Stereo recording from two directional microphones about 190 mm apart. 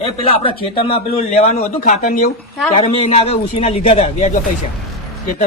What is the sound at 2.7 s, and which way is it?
A man's voice, 30° left (ahead or behind).